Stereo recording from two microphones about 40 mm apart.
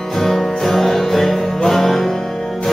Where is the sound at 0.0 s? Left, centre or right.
Centre.